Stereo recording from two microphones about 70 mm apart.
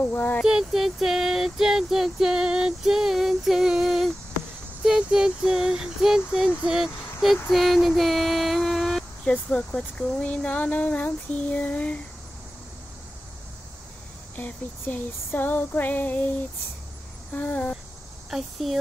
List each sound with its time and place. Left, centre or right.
0.0 s speech: left
0.5 s female singing: centre
4.8 s a sound: centre
7.4 s female singing: centre
9.3 s speech: centre
14.3 s speech: left
17.4 s speech: left
18.3 s speech: centre